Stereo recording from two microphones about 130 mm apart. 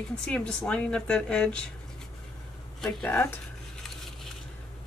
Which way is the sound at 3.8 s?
5° left (ahead or behind).